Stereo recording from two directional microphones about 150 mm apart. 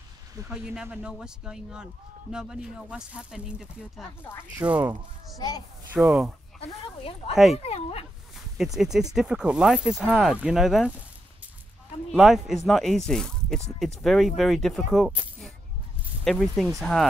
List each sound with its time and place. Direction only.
0.5 s speech: 5° right (ahead or behind)
4.2 s speech: 15° left (ahead or behind)
4.6 s speech: 10° right (ahead or behind)
6.6 s speech: 40° left (ahead or behind)
8.5 s speech: centre (ahead or behind)
12.1 s speech: centre (ahead or behind)